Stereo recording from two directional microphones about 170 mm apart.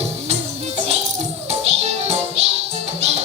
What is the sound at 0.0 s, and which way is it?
Music, 40° right (ahead or behind).